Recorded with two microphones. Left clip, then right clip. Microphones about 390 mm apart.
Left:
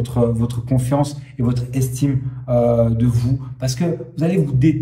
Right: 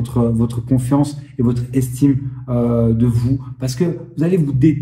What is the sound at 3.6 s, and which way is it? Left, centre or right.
A man's voice, centre.